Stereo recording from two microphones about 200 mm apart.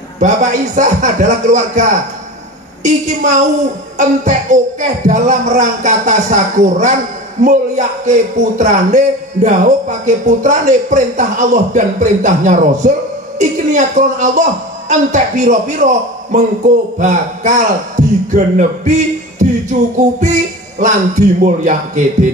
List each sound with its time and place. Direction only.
0.2 s a man's voice: 40° right (ahead or behind)
20.8 s a man's voice: 40° right (ahead or behind)